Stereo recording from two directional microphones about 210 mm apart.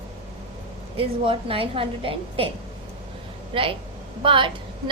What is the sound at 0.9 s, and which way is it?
A woman's voice, 25° right (ahead or behind).